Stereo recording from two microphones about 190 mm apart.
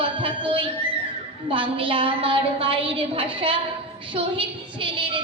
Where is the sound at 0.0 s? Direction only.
25° right (ahead or behind).